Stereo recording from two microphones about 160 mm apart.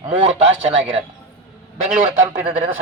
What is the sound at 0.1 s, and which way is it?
A man's voice, 40° right (ahead or behind).